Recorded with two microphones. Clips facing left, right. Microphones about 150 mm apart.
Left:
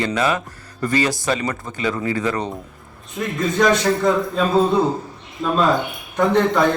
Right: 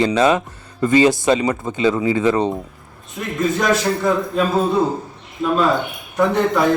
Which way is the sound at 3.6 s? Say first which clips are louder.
Left 4 dB; 5° right (ahead or behind).